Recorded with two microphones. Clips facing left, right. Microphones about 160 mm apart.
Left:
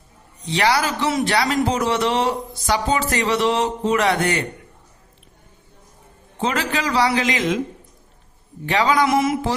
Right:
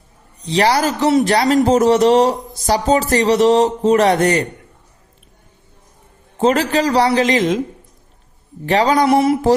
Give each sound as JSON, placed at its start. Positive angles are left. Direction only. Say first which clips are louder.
{"t": 0.4, "sound": "a man's voice", "louder": "right 4 dB", "side_deg": -35}
{"t": 6.4, "sound": "a man's voice", "louder": "right 8 dB", "side_deg": -40}
{"t": 8.6, "sound": "a man's voice", "louder": "right 4 dB", "side_deg": -40}